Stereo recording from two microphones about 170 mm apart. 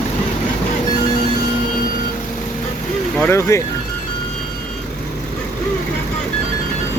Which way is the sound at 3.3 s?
15° left (ahead or behind).